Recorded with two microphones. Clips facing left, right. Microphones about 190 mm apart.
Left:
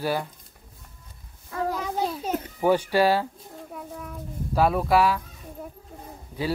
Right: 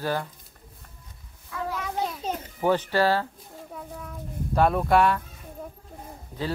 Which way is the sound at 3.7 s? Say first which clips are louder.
Left 1 dB; centre (ahead or behind).